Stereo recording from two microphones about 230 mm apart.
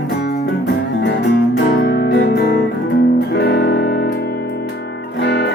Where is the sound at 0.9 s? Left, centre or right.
Left.